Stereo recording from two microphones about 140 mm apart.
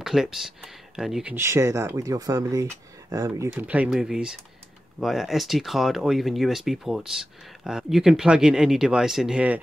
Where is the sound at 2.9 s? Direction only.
25° right (ahead or behind).